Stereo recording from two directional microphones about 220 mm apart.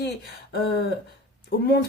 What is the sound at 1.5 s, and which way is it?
Speech, 45° left (ahead or behind).